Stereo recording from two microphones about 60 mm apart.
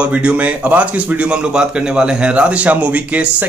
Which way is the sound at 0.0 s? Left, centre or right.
Centre.